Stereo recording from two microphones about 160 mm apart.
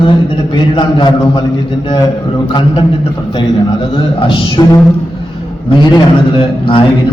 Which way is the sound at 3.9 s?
30° left (ahead or behind).